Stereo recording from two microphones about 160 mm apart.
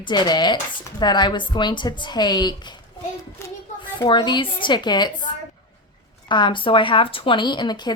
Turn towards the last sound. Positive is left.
turn(degrees=25)  # may be behind; listen again after turning